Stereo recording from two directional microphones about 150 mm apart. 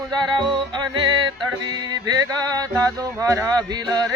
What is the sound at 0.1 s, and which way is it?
Music, 30° right (ahead or behind).